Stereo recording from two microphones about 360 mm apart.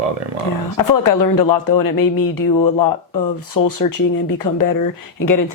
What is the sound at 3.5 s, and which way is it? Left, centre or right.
Speech, left.